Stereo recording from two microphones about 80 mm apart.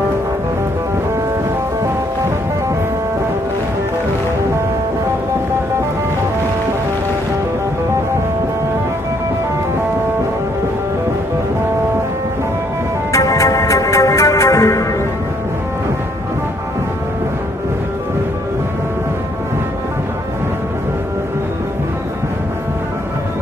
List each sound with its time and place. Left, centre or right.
13.1 s music: left